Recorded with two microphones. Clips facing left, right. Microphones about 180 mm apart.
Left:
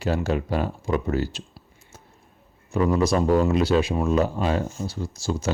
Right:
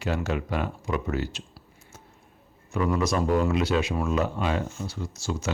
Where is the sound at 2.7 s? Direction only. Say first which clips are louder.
Left 4 dB; 30° left (ahead or behind).